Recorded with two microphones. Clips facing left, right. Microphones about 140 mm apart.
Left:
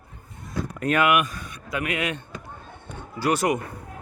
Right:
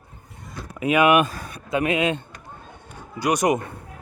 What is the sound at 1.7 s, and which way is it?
Speech, 25° right (ahead or behind).